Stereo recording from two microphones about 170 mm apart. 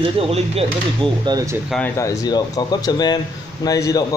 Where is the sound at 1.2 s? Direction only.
20° right (ahead or behind).